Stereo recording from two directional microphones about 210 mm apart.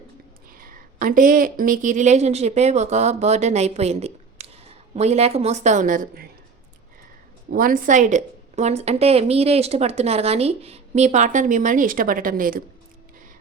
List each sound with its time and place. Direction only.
0.5 s a woman's voice: 40° right (ahead or behind)
7.5 s a woman's voice: 40° right (ahead or behind)